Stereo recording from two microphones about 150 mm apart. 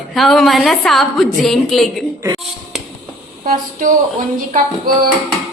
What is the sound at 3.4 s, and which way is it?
Speech, 65° right (ahead or behind).